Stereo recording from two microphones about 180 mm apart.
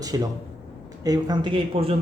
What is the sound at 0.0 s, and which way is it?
Speech, 20° right (ahead or behind).